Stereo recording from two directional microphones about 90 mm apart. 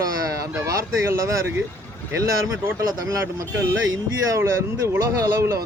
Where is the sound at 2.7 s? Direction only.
35° right (ahead or behind).